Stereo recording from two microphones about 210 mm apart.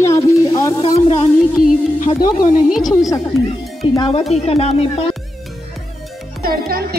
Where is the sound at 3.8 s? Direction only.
30° left (ahead or behind).